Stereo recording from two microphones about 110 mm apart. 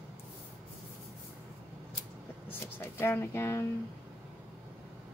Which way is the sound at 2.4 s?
20° left (ahead or behind).